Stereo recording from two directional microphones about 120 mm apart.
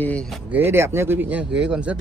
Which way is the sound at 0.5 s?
20° right (ahead or behind).